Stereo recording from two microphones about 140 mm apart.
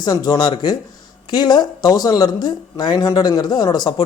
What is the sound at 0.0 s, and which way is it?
Speech, 30° left (ahead or behind).